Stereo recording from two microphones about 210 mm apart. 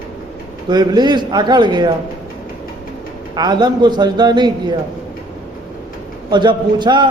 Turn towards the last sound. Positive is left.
turn(degrees=-20)  # may be behind; listen again after turning